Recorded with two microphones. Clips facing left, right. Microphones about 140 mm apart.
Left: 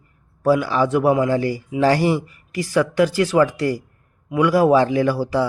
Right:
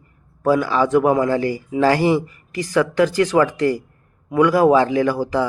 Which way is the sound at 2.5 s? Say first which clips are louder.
Right 1 dB; 10° left (ahead or behind).